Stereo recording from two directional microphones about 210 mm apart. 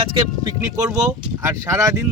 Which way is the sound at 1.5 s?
15° right (ahead or behind).